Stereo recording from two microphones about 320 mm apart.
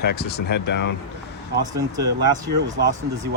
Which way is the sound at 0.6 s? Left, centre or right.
Left.